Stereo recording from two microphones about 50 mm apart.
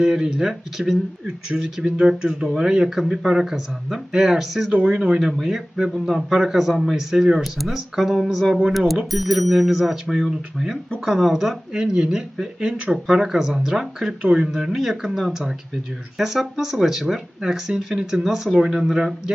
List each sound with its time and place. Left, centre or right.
0.0 s speech: centre